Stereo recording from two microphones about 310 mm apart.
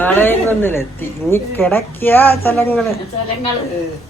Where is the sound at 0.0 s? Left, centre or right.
Centre.